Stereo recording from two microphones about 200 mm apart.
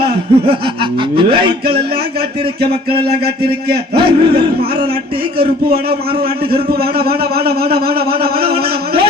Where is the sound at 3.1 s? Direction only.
50° right (ahead or behind).